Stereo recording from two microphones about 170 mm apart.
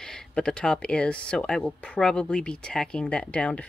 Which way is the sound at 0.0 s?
5° left (ahead or behind).